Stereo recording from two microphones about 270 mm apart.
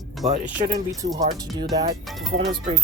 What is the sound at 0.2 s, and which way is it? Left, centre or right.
Speech, right.